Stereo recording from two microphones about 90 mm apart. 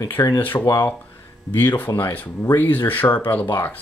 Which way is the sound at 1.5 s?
25° left (ahead or behind).